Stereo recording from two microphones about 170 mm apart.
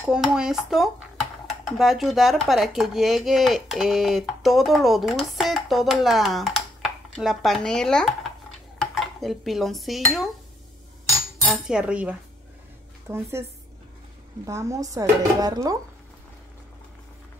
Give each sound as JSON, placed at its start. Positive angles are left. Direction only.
{"t": 0.1, "sound": "speech", "side_deg": -5}
{"t": 8.7, "sound": "dishes", "side_deg": 0}
{"t": 11.4, "sound": "cutlery", "side_deg": -5}
{"t": 14.4, "sound": "speech", "side_deg": -20}